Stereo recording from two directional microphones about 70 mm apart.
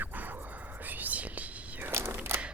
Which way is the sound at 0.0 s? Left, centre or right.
Right.